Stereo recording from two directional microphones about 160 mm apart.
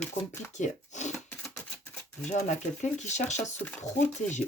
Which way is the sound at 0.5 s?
45° left (ahead or behind).